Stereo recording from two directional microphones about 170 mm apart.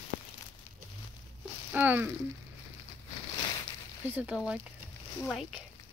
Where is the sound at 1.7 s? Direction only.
10° right (ahead or behind).